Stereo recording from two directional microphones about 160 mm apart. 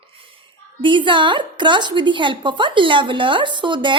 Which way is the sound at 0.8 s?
30° right (ahead or behind).